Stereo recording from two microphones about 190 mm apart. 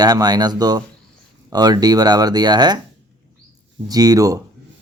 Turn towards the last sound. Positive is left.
turn(degrees=-15)  # may be behind; listen again after turning